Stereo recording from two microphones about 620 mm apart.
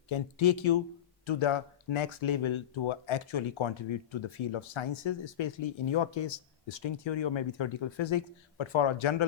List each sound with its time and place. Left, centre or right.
0.1 s speech: left